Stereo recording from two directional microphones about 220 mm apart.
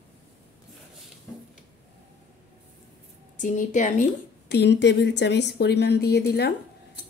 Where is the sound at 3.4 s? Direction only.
35° left (ahead or behind).